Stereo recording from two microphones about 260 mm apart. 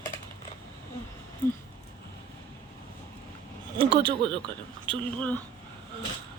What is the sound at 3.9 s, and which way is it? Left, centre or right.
Speech, centre.